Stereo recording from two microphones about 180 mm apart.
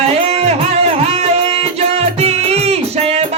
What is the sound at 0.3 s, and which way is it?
Music, 35° right (ahead or behind).